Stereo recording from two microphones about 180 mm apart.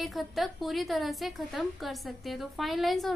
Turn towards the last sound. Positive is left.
turn(degrees=0)  # may be behind; listen again after turning